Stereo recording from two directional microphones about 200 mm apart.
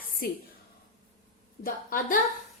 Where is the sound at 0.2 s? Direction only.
45° left (ahead or behind).